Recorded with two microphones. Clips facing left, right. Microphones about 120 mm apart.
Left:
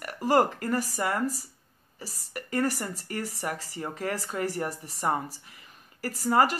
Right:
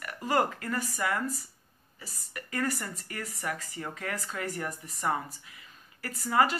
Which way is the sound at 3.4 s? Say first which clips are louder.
Left 1 dB; 25° left (ahead or behind).